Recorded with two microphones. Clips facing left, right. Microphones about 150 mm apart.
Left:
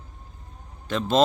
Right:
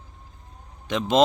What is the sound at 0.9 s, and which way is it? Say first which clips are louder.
Speech: right 1 dB; 15° right (ahead or behind).